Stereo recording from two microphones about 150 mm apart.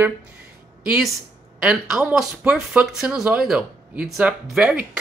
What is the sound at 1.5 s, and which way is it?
Speech, 5° right (ahead or behind).